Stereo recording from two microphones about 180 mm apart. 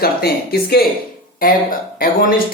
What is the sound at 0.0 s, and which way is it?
A woman's voice, 60° left (ahead or behind).